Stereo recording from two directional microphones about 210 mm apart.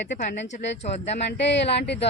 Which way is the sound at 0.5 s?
30° left (ahead or behind).